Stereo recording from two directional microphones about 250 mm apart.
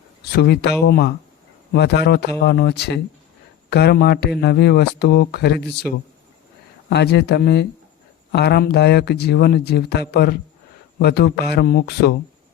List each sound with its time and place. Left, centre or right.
0.3 s speech: left
6.9 s speech: left